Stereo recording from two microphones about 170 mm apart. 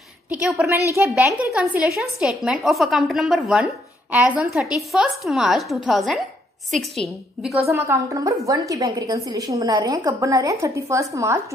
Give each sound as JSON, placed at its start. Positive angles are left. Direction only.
{"t": 0.3, "sound": "a woman's voice", "side_deg": 0}
{"t": 7.7, "sound": "a woman's voice", "side_deg": -15}